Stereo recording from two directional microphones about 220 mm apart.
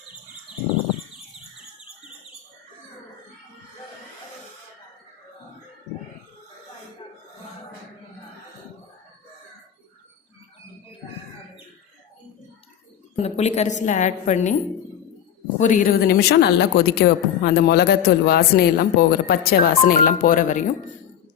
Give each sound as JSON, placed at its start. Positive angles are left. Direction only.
{"t": 13.1, "sound": "a woman's voice", "side_deg": 30}
{"t": 15.5, "sound": "a woman's voice", "side_deg": 35}